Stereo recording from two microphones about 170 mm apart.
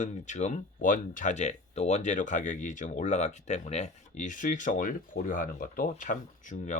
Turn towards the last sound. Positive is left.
turn(degrees=45)  # may be behind; listen again after turning